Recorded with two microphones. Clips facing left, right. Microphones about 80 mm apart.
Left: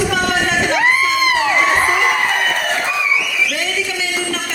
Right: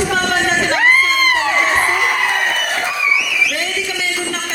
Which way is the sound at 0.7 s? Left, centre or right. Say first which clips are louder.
Right 2 dB; right.